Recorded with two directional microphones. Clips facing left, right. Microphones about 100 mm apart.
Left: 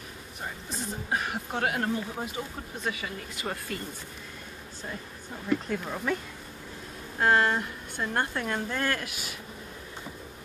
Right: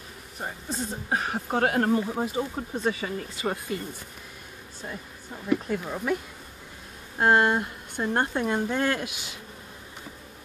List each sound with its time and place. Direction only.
0.4 s speech: 35° right (ahead or behind)
3.4 s speech: 15° right (ahead or behind)
5.5 s speech: 5° right (ahead or behind)
7.2 s speech: 15° right (ahead or behind)